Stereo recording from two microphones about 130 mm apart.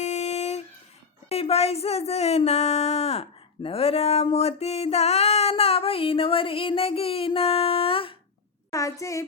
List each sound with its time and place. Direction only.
0.0 s a sound: 60° left (ahead or behind)
1.3 s speech: 50° left (ahead or behind)
8.7 s a child's voice: 25° left (ahead or behind)